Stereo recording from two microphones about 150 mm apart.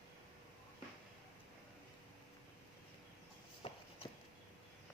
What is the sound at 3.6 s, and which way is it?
Walk, 40° left (ahead or behind).